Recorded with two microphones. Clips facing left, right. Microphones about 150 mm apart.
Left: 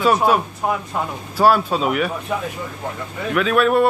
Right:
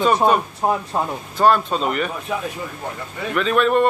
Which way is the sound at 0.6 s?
30° right (ahead or behind).